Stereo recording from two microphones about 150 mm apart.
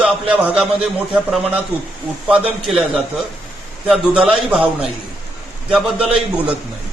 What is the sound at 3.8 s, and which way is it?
A man's voice, 5° right (ahead or behind).